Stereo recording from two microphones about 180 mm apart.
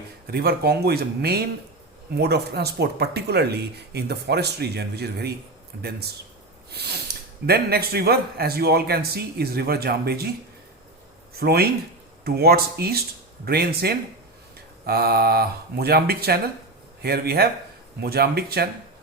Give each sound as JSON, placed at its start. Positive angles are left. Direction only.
{"t": 0.3, "sound": "a man's voice", "side_deg": -60}
{"t": 6.7, "sound": "a man's voice", "side_deg": -65}
{"t": 11.3, "sound": "a man's voice", "side_deg": -60}